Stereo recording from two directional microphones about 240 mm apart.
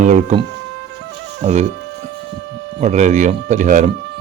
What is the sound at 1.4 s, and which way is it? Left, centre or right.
Speech, right.